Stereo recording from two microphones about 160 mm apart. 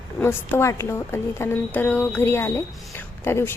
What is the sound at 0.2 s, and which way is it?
A woman's voice, 15° left (ahead or behind).